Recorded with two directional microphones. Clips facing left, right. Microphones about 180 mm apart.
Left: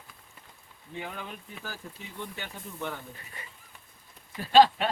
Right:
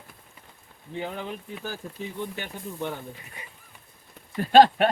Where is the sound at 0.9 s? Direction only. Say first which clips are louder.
Right 6 dB; 25° right (ahead or behind).